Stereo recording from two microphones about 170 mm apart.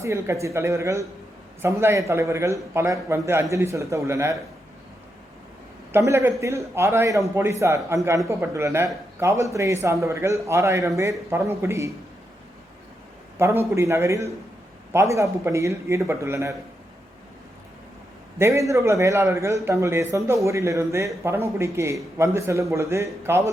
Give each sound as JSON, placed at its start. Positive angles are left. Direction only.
{"t": 0.0, "sound": "speech", "side_deg": -15}
{"t": 5.9, "sound": "speech", "side_deg": -15}
{"t": 13.4, "sound": "speech", "side_deg": -15}
{"t": 18.3, "sound": "speech", "side_deg": -15}